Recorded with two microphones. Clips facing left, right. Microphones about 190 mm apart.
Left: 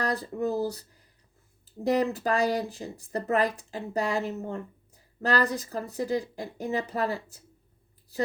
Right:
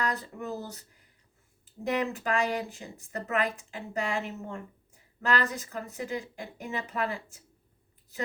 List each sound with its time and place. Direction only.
0.0 s speech: 35° left (ahead or behind)